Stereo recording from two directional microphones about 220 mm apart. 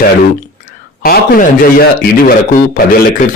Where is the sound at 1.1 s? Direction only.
45° left (ahead or behind).